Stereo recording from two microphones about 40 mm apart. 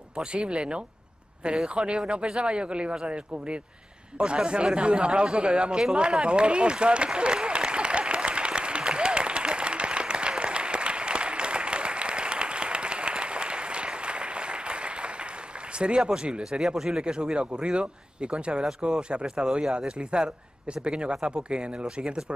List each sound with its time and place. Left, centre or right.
0.2 s speech: right
1.8 s speech: right
5.9 s applause: right
15.8 s speech: right
16.6 s speech: centre
17.0 s speech: right
20.8 s speech: right